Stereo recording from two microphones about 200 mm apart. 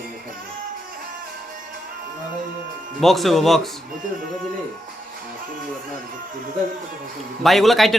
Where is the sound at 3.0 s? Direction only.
Centre (ahead or behind).